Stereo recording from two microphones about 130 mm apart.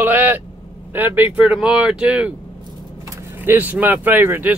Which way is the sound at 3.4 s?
15° right (ahead or behind).